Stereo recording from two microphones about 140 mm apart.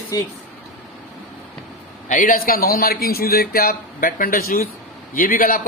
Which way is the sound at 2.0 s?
75° left (ahead or behind).